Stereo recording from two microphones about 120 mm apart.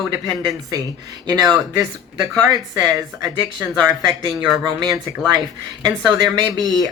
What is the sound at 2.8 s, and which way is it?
Speech, 35° right (ahead or behind).